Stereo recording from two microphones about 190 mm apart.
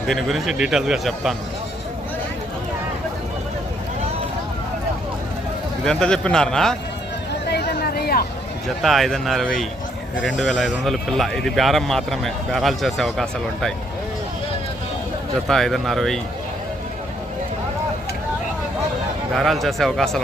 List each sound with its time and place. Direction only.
0.1 s speech: centre (ahead or behind)
5.8 s speech: 5° left (ahead or behind)
7.5 s a sound: 55° left (ahead or behind)
8.6 s speech: centre (ahead or behind)
15.4 s speech: centre (ahead or behind)
19.3 s speech: centre (ahead or behind)